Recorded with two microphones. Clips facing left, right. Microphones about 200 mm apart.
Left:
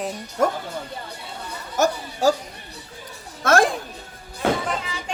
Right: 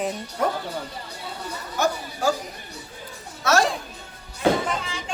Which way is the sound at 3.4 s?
50° left (ahead or behind).